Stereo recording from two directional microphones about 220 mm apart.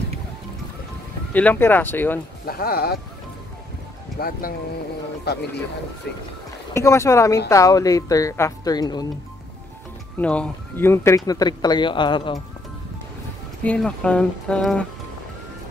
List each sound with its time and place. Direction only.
1.3 s speech: 10° left (ahead or behind)
2.4 s speech: 45° left (ahead or behind)
4.2 s speech: 40° left (ahead or behind)
6.7 s speech: 15° left (ahead or behind)
10.2 s speech: 5° left (ahead or behind); by 12.4 s 20° left (ahead or behind)
13.7 s speech: 5° left (ahead or behind)